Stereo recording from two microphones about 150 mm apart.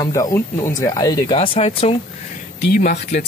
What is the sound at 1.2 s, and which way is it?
Speech, 40° left (ahead or behind).